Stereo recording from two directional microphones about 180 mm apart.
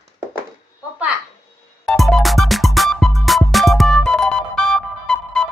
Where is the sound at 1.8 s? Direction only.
Centre (ahead or behind).